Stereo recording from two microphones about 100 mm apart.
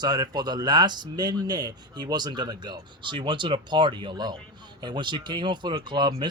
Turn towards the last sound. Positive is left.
turn(degrees=-50)  # may be behind; listen again after turning